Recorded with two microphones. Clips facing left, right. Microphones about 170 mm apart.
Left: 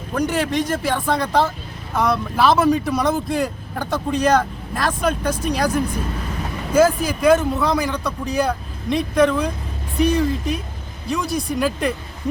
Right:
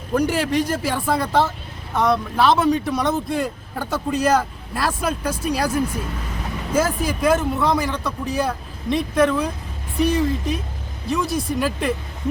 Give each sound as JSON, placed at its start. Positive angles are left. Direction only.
{"t": 0.2, "sound": "speech", "side_deg": -10}
{"t": 6.7, "sound": "speech", "side_deg": 0}